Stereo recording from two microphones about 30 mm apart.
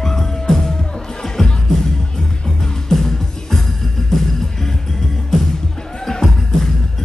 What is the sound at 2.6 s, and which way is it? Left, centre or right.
Music, centre.